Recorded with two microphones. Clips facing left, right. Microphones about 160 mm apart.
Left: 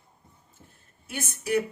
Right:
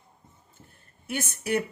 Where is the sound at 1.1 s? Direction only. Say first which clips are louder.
Left 1 dB; 60° right (ahead or behind).